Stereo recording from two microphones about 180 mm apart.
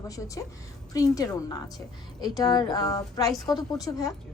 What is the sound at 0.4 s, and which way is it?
A woman's voice, 20° left (ahead or behind).